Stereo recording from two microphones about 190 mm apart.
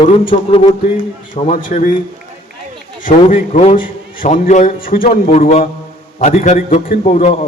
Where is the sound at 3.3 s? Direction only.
40° left (ahead or behind).